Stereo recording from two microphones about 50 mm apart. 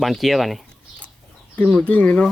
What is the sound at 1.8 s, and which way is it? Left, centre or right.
Speech, left.